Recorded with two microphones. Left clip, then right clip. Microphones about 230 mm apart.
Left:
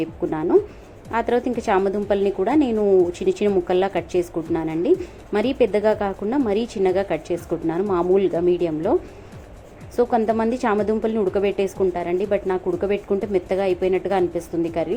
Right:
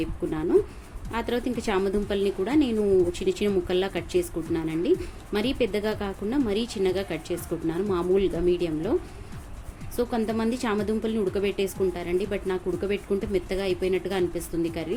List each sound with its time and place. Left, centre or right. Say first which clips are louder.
0.0 s speech: left 5 dB; centre